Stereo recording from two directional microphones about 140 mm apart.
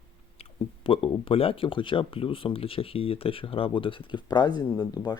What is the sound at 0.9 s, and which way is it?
Speech, 40° left (ahead or behind).